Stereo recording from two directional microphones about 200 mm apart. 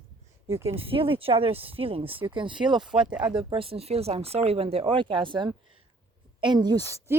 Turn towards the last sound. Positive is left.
turn(degrees=-15)  # may be behind; listen again after turning